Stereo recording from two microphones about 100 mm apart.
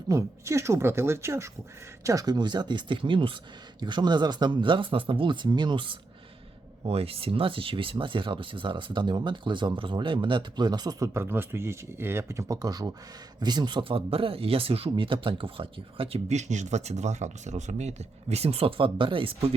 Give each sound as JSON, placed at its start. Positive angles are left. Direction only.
{"t": 0.1, "sound": "speech", "side_deg": -30}
{"t": 2.0, "sound": "speech", "side_deg": -40}
{"t": 6.8, "sound": "speech", "side_deg": -75}
{"t": 11.1, "sound": "speech", "side_deg": -25}
{"t": 16.8, "sound": "speech", "side_deg": -90}